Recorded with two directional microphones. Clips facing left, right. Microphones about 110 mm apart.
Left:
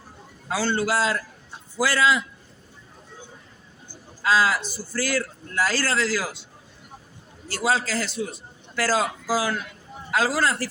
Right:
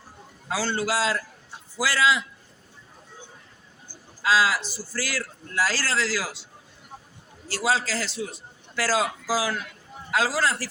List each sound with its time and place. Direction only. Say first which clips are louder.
0.5 s a man's voice: left 2 dB; 50° left (ahead or behind)
4.2 s a man's voice: left 1 dB; 45° left (ahead or behind)
7.5 s a man's voice: left 1 dB; 50° left (ahead or behind)